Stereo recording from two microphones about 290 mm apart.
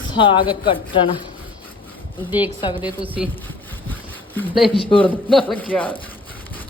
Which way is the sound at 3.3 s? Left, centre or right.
Centre.